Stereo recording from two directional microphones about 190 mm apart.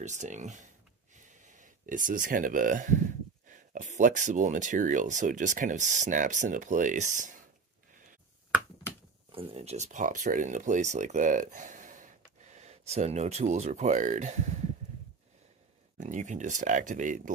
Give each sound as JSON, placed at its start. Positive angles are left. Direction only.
{"t": 0.0, "sound": "speech", "side_deg": -40}
{"t": 9.3, "sound": "speech", "side_deg": -30}
{"t": 16.0, "sound": "speech", "side_deg": -40}